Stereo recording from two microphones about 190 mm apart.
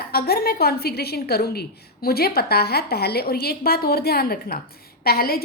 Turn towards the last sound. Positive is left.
turn(degrees=55)  # may be behind; listen again after turning